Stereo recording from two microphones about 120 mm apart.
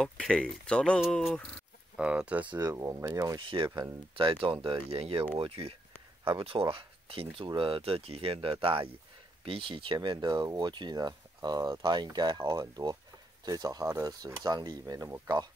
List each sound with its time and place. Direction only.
0.0 s speech: 5° left (ahead or behind)
2.0 s speech: 10° right (ahead or behind)
2.6 s speech: 25° right (ahead or behind)
3.3 s speech: 45° right (ahead or behind)
9.9 s speech: 35° right (ahead or behind)
15.2 s speech: 35° right (ahead or behind)